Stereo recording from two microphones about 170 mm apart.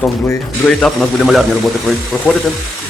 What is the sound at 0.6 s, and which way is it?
Speech, centre (ahead or behind).